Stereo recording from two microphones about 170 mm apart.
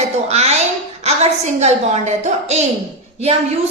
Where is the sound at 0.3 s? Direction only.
40° right (ahead or behind).